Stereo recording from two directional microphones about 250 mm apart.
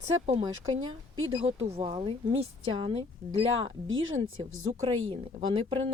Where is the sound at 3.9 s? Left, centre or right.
Right.